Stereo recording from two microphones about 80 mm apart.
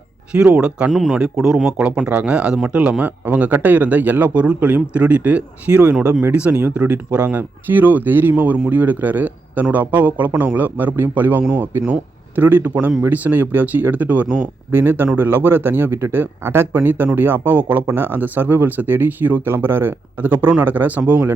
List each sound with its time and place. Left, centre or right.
0.3 s speech: centre
0.9 s a man's voice: centre